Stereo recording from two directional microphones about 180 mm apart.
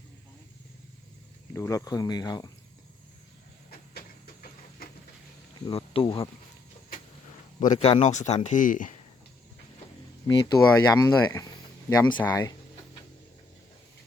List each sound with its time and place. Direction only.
1.5 s speech: 15° left (ahead or behind)
5.6 s speech: 30° left (ahead or behind)
7.6 s speech: 45° left (ahead or behind)
10.2 s speech: 20° left (ahead or behind)